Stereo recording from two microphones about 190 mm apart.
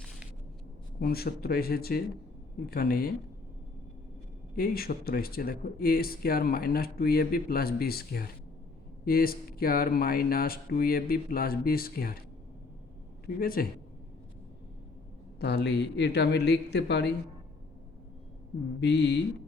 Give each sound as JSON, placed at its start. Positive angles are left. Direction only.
{"t": 0.9, "sound": "speech", "side_deg": 55}
{"t": 4.5, "sound": "speech", "side_deg": 50}
{"t": 13.4, "sound": "speech", "side_deg": 50}
{"t": 15.4, "sound": "speech", "side_deg": 60}
{"t": 18.8, "sound": "speech", "side_deg": 65}